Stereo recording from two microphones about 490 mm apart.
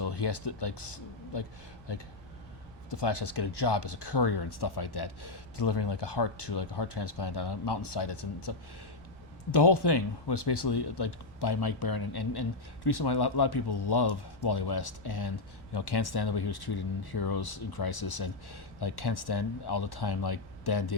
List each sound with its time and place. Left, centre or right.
0.0 s speech: left